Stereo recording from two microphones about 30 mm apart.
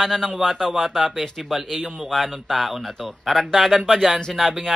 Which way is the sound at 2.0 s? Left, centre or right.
Centre.